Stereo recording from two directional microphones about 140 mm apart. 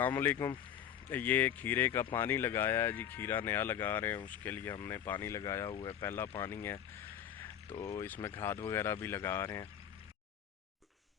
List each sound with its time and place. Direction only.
0.0 s speech: 15° left (ahead or behind)
5.7 s speech: 35° left (ahead or behind)
6.0 s speech: 20° left (ahead or behind)
7.8 s speech: 20° left (ahead or behind)